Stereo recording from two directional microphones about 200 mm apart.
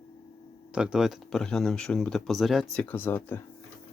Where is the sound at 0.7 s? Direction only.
5° right (ahead or behind).